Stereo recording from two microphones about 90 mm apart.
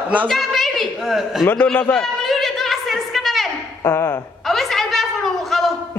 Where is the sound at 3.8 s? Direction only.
30° left (ahead or behind).